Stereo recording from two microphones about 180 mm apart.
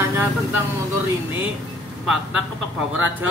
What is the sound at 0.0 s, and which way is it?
Speech, 10° right (ahead or behind).